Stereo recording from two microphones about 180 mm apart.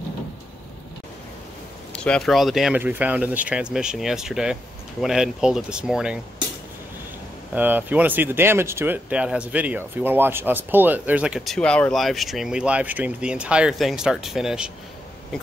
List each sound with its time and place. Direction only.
1.9 s speech: 5° left (ahead or behind)
7.5 s speech: 10° right (ahead or behind)